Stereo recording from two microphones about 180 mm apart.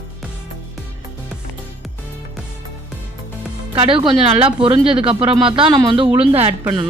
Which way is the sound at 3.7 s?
30° right (ahead or behind).